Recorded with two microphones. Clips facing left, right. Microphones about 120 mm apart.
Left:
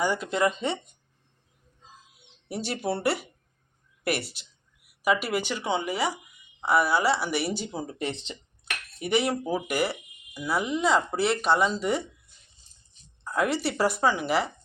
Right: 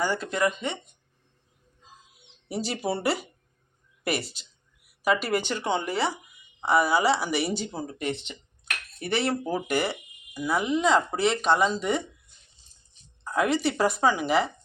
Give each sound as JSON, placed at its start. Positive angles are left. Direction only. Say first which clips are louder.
{"t": 0.0, "sound": "speech", "louder": "left 1 dB", "side_deg": 15}
{"t": 2.5, "sound": "speech", "louder": "right 1 dB", "side_deg": 0}
{"t": 7.7, "sound": "speech", "louder": "even", "side_deg": 15}
{"t": 7.9, "sound": "speech", "louder": "right 1 dB", "side_deg": 30}
{"t": 9.0, "sound": "speech", "louder": "left 1 dB", "side_deg": 15}
{"t": 13.2, "sound": "speech", "louder": "right 2 dB", "side_deg": 0}